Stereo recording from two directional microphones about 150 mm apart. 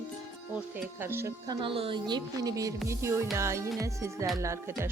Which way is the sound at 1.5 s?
35° right (ahead or behind).